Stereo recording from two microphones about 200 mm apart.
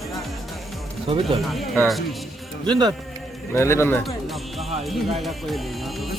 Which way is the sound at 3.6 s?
10° left (ahead or behind).